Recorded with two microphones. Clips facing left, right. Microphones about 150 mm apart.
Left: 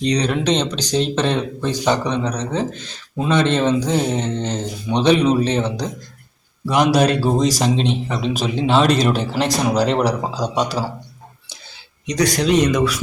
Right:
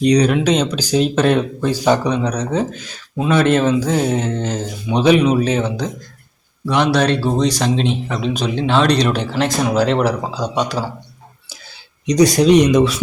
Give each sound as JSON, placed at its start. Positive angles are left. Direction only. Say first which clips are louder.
{"t": 0.1, "sound": "speech", "louder": "right 4 dB", "side_deg": -10}
{"t": 6.7, "sound": "a man's voice", "louder": "even", "side_deg": 10}
{"t": 7.6, "sound": "speech", "louder": "right 1 dB", "side_deg": 0}
{"t": 12.0, "sound": "speech", "louder": "right 6 dB", "side_deg": -20}